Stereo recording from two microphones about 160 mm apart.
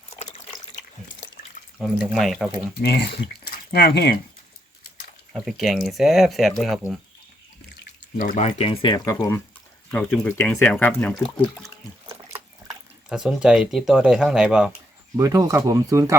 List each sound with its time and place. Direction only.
1.8 s speech: centre (ahead or behind)
2.8 s speech: 90° left
5.3 s speech: centre (ahead or behind)
8.2 s speech: 50° left (ahead or behind); by 9.1 s 30° left (ahead or behind)
9.1 s speech: 15° left (ahead or behind)
13.1 s speech: 5° right (ahead or behind)
15.1 s speech: 20° right (ahead or behind)